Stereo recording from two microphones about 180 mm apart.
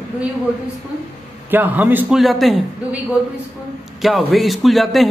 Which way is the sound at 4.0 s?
Centre (ahead or behind).